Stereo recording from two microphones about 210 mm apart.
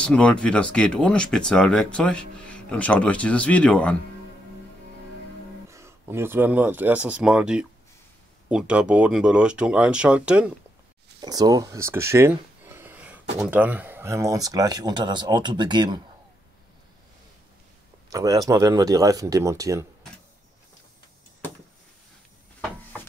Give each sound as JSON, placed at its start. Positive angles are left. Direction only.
{"t": 0.0, "sound": "speech", "side_deg": 5}
{"t": 5.7, "sound": "speech", "side_deg": -15}
{"t": 11.1, "sound": "a sound", "side_deg": -20}
{"t": 13.4, "sound": "speech", "side_deg": -10}
{"t": 18.1, "sound": "speech", "side_deg": -15}